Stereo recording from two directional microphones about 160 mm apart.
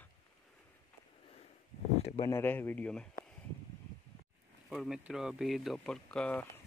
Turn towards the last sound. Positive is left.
turn(degrees=5)  # may be behind; listen again after turning